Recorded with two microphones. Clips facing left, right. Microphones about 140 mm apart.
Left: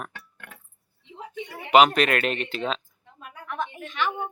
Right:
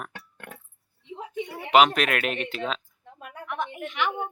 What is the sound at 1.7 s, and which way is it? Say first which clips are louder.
Speech: left 2 dB; centre (ahead or behind).